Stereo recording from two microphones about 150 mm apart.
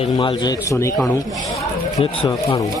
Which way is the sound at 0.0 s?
35° left (ahead or behind).